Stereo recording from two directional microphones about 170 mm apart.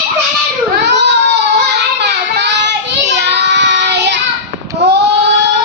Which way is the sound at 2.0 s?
80° right.